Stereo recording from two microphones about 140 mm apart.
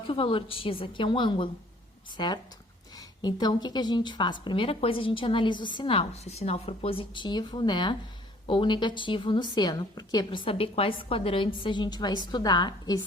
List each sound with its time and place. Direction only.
0.1 s a woman's voice: 40° left (ahead or behind)